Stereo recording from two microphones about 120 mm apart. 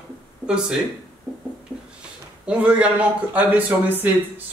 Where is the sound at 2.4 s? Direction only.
10° right (ahead or behind).